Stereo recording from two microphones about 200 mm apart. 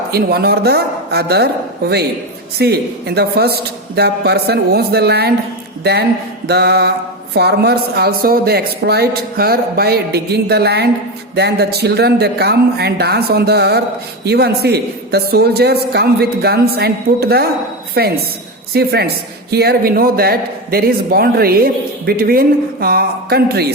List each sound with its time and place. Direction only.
0.1 s a man's voice: 50° right (ahead or behind)
6.5 s music: 55° right (ahead or behind)
7.3 s a man's voice: 55° right (ahead or behind)